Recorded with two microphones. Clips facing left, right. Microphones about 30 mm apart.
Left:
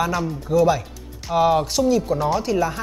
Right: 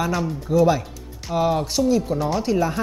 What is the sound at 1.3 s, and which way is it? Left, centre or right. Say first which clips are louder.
Speech: left 3 dB; centre.